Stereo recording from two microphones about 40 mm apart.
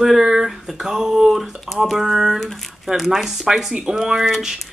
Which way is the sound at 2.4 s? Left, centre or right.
Centre.